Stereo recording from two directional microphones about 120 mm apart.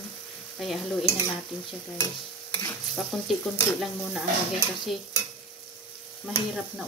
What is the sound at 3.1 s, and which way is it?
Sizzle, 5° left (ahead or behind).